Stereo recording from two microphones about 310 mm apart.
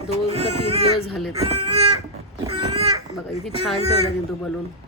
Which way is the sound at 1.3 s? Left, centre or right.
Centre.